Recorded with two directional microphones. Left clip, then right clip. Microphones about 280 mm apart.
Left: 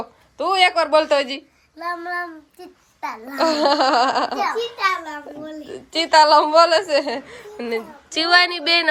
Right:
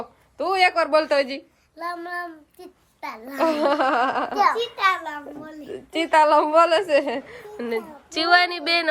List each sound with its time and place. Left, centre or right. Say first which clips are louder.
0.3 s a child's voice: left 3 dB; centre
3.2 s a woman's voice: left 3 dB; centre
4.8 s a child's voice: even; right
5.6 s a woman's voice: left 3 dB; centre